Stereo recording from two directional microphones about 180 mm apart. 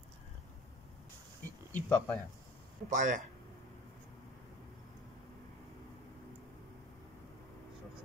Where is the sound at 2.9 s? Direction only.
45° right (ahead or behind).